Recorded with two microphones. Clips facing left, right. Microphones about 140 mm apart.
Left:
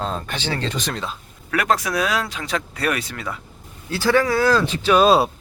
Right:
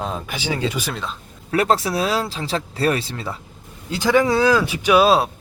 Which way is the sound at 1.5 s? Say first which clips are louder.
Right 2 dB; 30° right (ahead or behind).